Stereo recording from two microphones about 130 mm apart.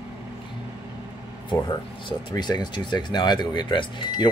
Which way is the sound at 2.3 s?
30° left (ahead or behind).